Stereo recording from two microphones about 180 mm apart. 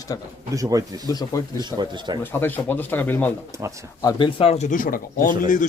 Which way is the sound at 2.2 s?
10° left (ahead or behind).